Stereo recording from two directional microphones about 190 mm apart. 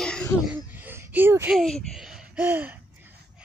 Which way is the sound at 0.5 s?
10° right (ahead or behind).